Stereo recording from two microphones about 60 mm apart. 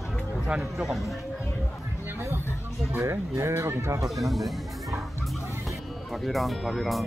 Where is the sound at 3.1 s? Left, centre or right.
Right.